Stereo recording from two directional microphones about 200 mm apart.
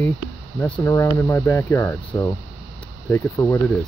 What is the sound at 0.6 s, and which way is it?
Speech, 10° left (ahead or behind).